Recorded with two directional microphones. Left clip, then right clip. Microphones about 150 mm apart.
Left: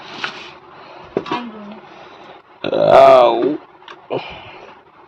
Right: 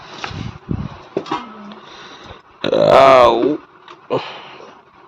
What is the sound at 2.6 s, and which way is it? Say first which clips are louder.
Speech: left 1 dB; 35° right (ahead or behind).